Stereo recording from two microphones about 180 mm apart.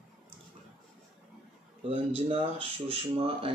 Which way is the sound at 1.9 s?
30° right (ahead or behind).